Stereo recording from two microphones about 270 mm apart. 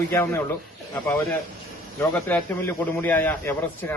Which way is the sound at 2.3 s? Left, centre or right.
Centre.